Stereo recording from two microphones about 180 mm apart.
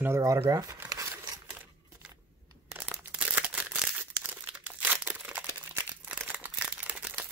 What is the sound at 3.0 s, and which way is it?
Crumpling, 10° right (ahead or behind).